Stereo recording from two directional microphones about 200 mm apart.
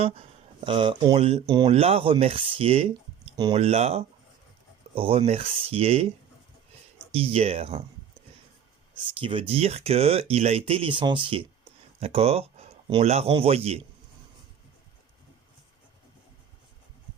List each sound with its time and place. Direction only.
0.0 s speech: 30° right (ahead or behind)
7.1 s speech: 30° right (ahead or behind)
9.1 s speech: 25° right (ahead or behind)